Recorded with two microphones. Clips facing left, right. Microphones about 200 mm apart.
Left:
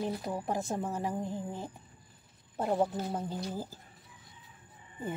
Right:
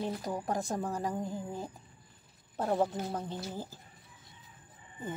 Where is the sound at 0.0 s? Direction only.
5° left (ahead or behind).